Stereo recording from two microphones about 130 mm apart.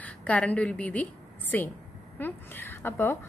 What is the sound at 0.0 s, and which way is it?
A woman's voice, 10° left (ahead or behind).